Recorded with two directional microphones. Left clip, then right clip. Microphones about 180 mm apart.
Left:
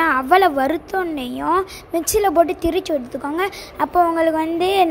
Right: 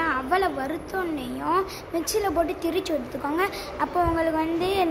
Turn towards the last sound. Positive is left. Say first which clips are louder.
# left 7 dB
turn(degrees=45)  # may be behind; listen again after turning